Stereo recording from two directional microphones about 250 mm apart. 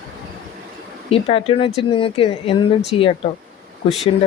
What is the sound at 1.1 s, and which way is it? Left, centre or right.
Speech, left.